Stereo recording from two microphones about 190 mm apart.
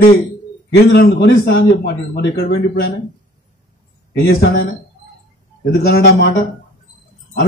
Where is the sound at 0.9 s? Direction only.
60° left (ahead or behind).